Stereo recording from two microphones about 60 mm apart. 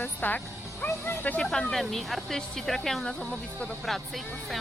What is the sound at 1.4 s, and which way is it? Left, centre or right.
Speech, centre.